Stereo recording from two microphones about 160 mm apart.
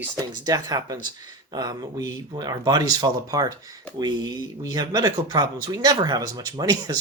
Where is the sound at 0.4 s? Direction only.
25° right (ahead or behind).